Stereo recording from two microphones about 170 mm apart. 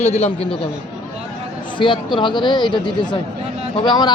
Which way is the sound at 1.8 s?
30° left (ahead or behind).